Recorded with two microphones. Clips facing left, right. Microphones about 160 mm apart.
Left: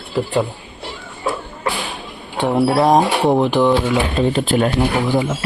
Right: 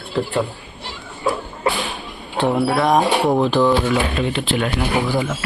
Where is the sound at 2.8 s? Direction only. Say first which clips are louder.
Left 4 dB; 30° left (ahead or behind).